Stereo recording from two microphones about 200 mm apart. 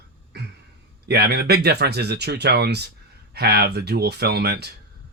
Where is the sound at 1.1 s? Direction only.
55° right (ahead or behind).